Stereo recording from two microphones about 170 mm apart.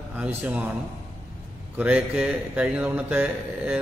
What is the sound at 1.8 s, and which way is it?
A man's voice, 5° right (ahead or behind).